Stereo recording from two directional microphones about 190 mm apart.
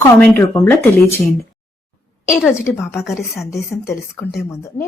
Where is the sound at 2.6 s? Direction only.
15° left (ahead or behind).